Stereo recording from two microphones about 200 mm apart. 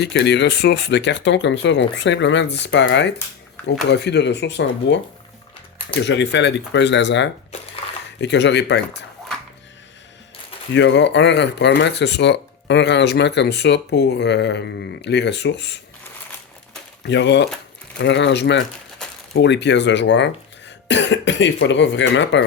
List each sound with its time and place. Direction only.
0.0 s speech: 60° left (ahead or behind)
6.0 s speech: 60° left (ahead or behind)
7.8 s a sound: 30° left (ahead or behind)
8.2 s speech: 60° left (ahead or behind)
10.8 s speech: 60° left (ahead or behind)
17.1 s speech: 60° left (ahead or behind)